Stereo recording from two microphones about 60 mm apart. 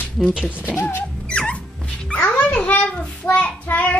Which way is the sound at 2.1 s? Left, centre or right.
Left.